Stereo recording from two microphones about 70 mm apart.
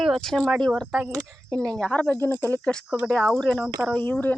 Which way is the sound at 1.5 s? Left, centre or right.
Right.